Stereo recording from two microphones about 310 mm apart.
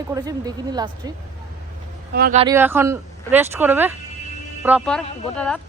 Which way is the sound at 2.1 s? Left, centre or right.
Right.